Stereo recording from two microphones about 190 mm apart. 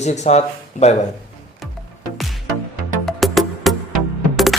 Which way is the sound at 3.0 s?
Centre (ahead or behind).